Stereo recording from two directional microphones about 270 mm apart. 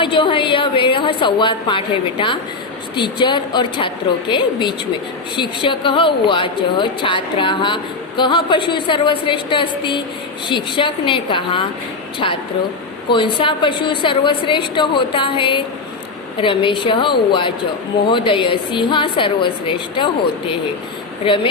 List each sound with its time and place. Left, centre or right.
0.0 s a woman's voice: centre
21.2 s speech: centre